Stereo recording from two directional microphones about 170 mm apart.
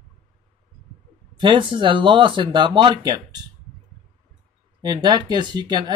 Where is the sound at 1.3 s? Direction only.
30° right (ahead or behind).